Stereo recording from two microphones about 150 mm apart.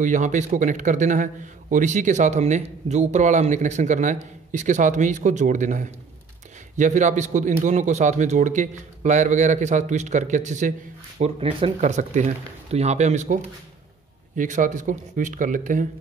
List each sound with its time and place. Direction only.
0.0 s a man's voice: 55° right (ahead or behind)
11.1 s speech: 40° right (ahead or behind)
11.8 s a man's voice: 50° right (ahead or behind)